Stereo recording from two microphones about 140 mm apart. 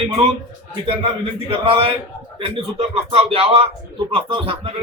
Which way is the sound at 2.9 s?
45° right (ahead or behind).